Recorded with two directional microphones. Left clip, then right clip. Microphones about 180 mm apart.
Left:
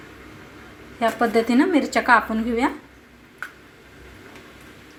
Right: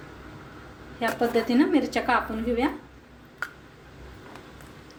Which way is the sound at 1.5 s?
25° left (ahead or behind).